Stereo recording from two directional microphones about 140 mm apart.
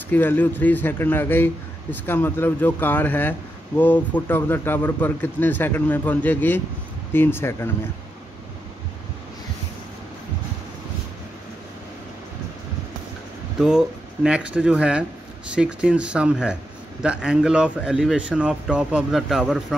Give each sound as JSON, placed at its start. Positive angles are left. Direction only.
{"t": 0.1, "sound": "a man's voice", "side_deg": 15}
{"t": 13.6, "sound": "speech", "side_deg": -5}